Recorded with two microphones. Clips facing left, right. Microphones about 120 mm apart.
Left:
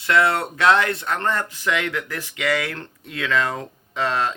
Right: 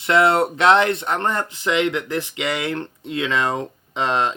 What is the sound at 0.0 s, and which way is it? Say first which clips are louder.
Speech: right 3 dB; 25° right (ahead or behind).